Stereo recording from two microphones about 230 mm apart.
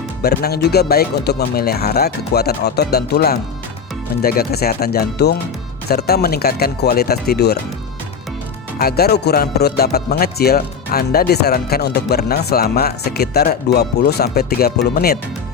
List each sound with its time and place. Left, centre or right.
0.2 s speech: left
8.8 s speech: left